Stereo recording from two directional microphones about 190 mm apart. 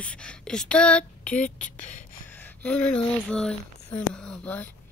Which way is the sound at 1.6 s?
45° left (ahead or behind).